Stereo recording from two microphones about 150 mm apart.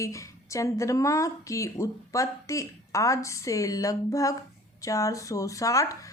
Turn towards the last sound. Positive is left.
turn(degrees=20)  # may be behind; listen again after turning